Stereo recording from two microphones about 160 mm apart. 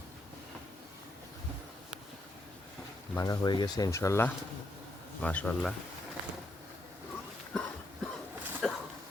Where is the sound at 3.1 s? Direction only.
25° left (ahead or behind); by 5.7 s 5° left (ahead or behind).